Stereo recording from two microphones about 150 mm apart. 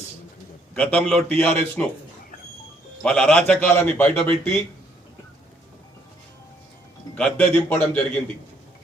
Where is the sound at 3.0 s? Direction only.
5° left (ahead or behind).